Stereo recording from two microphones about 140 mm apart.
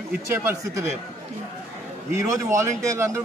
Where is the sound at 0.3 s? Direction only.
15° right (ahead or behind).